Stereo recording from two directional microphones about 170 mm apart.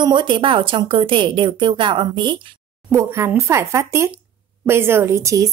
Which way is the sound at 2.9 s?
15° right (ahead or behind).